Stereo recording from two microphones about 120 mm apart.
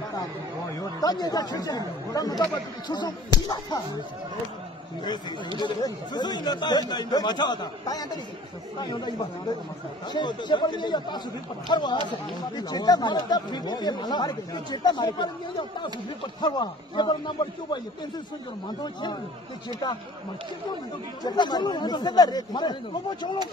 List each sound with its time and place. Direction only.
0.7 s speech: 35° left (ahead or behind)
5.6 s speech: 35° left (ahead or behind)
16.3 s speech: 40° left (ahead or behind)
18.8 s speech: 40° left (ahead or behind)
21.2 s speech: 35° left (ahead or behind)